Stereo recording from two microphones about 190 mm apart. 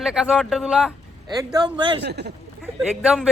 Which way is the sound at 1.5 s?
25° right (ahead or behind).